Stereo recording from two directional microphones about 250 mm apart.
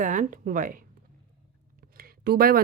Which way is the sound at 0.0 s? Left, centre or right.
Right.